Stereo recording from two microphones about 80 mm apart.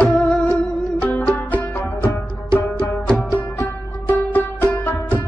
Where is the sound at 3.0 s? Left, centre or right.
Centre.